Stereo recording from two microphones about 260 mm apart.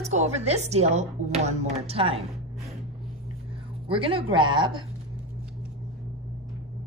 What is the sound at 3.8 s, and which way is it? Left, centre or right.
A woman's voice, right.